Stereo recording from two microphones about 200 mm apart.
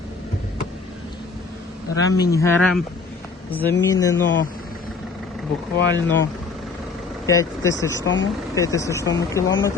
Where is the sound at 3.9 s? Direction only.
15° left (ahead or behind).